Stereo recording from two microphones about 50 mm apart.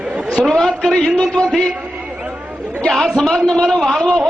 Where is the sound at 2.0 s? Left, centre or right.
Centre.